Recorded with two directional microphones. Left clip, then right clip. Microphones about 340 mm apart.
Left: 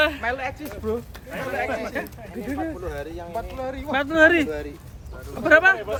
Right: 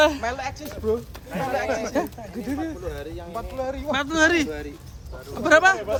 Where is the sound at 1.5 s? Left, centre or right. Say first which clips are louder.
Right 1 dB; centre.